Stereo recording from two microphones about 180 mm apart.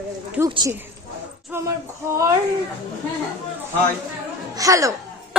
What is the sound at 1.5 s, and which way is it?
Speech, 15° right (ahead or behind).